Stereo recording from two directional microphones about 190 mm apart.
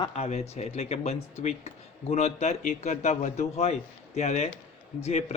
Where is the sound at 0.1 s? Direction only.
35° left (ahead or behind).